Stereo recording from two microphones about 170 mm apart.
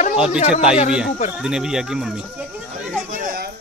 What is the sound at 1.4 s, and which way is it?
Speech, 5° right (ahead or behind).